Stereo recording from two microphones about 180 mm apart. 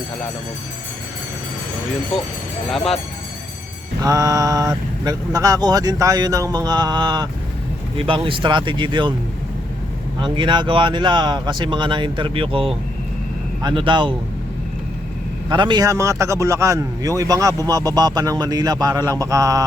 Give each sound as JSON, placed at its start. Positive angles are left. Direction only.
{"t": 2.7, "sound": "speech", "side_deg": 0}
{"t": 4.0, "sound": "a man's voice", "side_deg": -20}
{"t": 10.2, "sound": "a man's voice", "side_deg": -25}
{"t": 15.4, "sound": "a man's voice", "side_deg": -25}